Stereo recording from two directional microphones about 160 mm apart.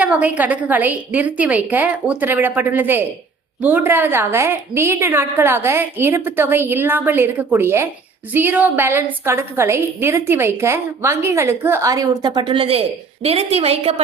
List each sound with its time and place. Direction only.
0.0 s a woman's voice: 10° right (ahead or behind); by 14.0 s 40° right (ahead or behind)